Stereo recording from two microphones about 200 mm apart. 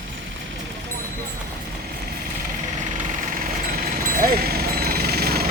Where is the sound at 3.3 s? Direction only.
45° right (ahead or behind).